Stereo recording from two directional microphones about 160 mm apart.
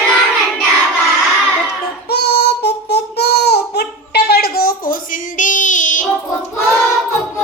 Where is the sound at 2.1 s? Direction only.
90° left; by 5.0 s 70° left (ahead or behind).